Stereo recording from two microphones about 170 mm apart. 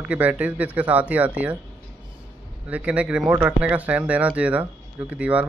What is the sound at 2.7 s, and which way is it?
Speech, 10° right (ahead or behind).